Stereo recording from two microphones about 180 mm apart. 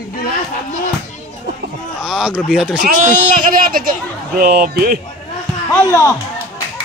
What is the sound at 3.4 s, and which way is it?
Speech, 50° right (ahead or behind).